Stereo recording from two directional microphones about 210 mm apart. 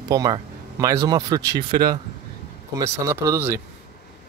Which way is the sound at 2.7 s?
15° right (ahead or behind).